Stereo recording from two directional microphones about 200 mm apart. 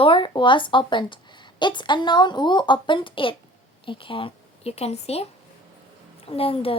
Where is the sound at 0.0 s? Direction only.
25° left (ahead or behind).